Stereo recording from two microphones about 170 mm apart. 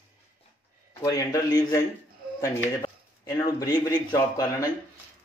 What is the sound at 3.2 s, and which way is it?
Speech, 20° left (ahead or behind).